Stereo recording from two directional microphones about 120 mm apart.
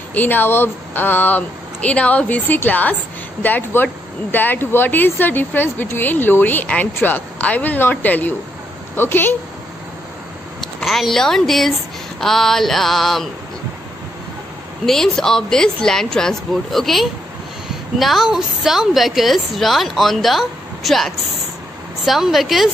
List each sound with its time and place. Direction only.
0.1 s speech: 15° left (ahead or behind)
10.6 s a woman's voice: centre (ahead or behind)
14.9 s a woman's voice: 5° left (ahead or behind)